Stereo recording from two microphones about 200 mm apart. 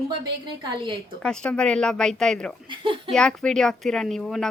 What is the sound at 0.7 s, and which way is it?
Speech, 25° right (ahead or behind).